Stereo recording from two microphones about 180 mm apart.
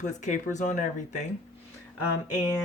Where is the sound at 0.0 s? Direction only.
40° left (ahead or behind).